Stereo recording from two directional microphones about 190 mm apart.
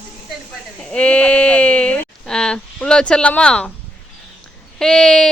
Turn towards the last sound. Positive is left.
turn(degrees=0)  # may be behind; listen again after turning